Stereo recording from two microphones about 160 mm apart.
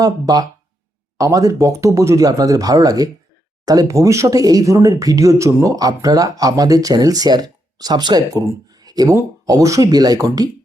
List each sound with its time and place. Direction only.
0.0 s speech: 25° right (ahead or behind)